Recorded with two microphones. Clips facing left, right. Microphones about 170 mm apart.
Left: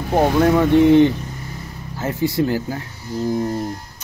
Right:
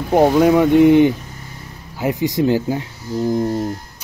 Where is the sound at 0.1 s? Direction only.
10° right (ahead or behind).